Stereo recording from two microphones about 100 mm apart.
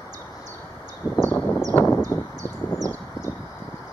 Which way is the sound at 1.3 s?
20° left (ahead or behind).